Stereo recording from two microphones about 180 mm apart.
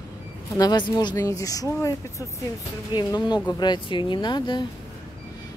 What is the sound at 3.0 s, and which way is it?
Speech, 25° left (ahead or behind).